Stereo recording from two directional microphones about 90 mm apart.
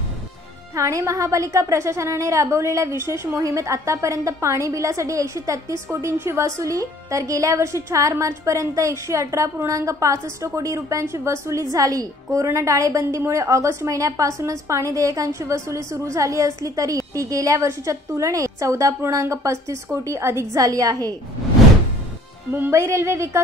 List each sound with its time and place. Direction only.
0.7 s a woman's voice: 35° right (ahead or behind)
22.5 s a woman's voice: 30° right (ahead or behind)